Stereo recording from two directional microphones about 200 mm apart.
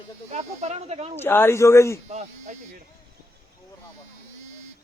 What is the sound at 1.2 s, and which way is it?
Speech, 10° left (ahead or behind).